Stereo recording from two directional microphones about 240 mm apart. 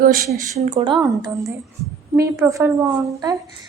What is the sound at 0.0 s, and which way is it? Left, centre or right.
A woman's voice, right.